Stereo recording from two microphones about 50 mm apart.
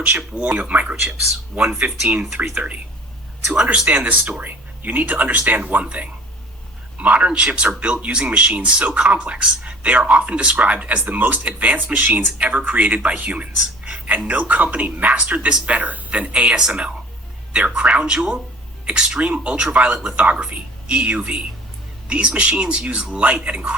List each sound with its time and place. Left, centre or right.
0.2 s speech: centre
0.6 s speech: right
1.5 s speech: right
3.8 s speech: right
15.4 s speech: right